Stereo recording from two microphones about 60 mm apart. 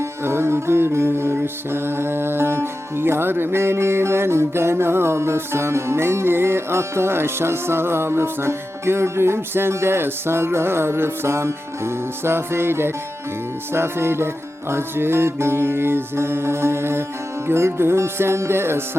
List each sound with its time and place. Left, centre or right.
0.0 s music: right